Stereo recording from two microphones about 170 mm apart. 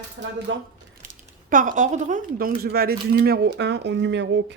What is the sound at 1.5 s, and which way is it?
A woman's voice, 50° right (ahead or behind).